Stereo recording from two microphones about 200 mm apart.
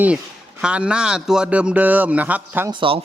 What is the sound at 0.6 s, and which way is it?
Speech, 5° right (ahead or behind).